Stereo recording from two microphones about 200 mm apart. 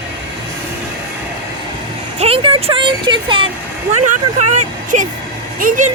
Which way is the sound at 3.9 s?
35° right (ahead or behind).